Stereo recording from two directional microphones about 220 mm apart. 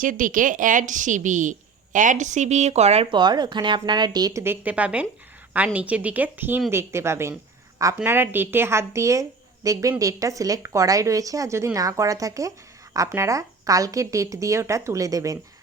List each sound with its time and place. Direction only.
0.0 s a woman's voice: 40° right (ahead or behind); by 15.4 s 15° right (ahead or behind)